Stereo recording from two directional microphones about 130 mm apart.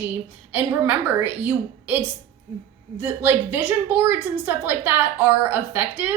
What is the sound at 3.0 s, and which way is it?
A woman's voice, 15° right (ahead or behind).